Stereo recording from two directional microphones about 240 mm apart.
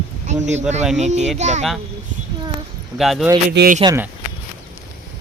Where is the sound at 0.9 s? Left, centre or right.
Right.